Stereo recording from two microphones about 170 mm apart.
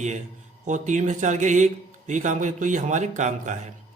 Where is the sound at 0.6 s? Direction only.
45° right (ahead or behind).